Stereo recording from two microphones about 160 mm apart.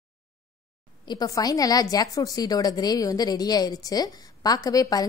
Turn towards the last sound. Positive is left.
turn(degrees=25)  # may be behind; listen again after turning